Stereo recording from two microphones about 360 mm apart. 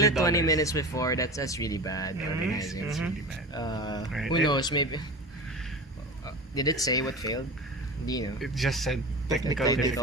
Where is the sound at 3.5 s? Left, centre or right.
Centre.